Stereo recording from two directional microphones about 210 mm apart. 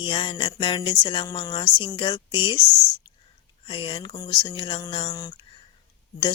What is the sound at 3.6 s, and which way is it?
A woman's voice, 25° left (ahead or behind).